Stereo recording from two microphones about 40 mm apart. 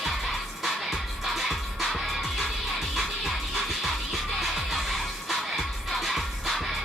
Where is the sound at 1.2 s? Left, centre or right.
Centre.